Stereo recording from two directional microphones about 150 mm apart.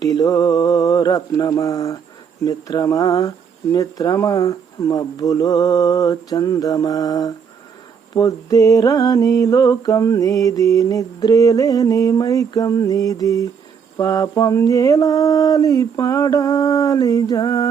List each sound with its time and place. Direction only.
0.0 s mantra: 25° left (ahead or behind)